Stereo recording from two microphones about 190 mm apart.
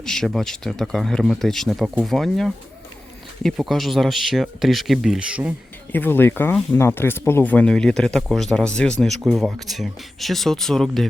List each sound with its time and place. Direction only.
0.0 s speech: 5° left (ahead or behind)
5.9 s speech: 10° left (ahead or behind)